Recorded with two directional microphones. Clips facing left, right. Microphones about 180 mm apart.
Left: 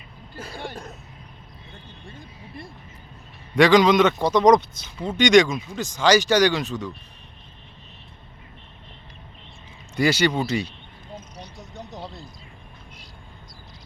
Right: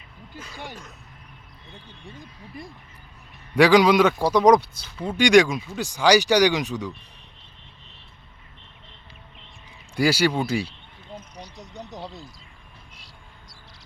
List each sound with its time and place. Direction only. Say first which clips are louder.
2.0 s speech: right 1 dB; 15° right (ahead or behind)
9.9 s speech: even; 10° right (ahead or behind)
11.5 s a sound: even; 15° right (ahead or behind)